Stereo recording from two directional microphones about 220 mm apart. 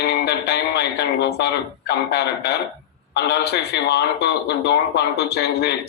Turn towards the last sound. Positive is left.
turn(degrees=50)  # may be behind; listen again after turning